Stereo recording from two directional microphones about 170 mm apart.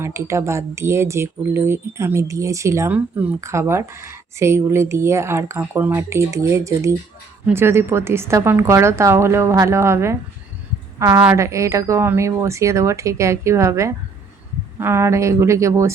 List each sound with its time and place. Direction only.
0.0 s speech: 15° right (ahead or behind)
11.2 s speech: 15° right (ahead or behind)